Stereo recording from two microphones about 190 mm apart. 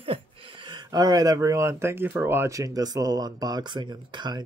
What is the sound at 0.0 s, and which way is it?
Speech, 25° right (ahead or behind).